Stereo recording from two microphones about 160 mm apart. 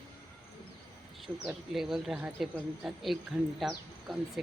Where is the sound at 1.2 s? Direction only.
Centre (ahead or behind).